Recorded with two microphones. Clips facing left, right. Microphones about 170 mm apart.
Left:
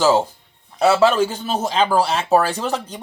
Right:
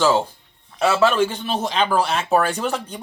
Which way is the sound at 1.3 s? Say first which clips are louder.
Left 2 dB; 40° left (ahead or behind).